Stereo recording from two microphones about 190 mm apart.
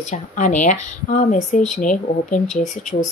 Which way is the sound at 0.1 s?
40° left (ahead or behind).